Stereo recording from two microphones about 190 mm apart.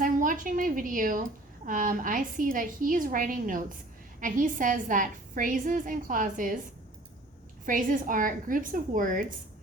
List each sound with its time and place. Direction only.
0.0 s a woman's voice: 45° right (ahead or behind)
7.6 s a woman's voice: 45° right (ahead or behind)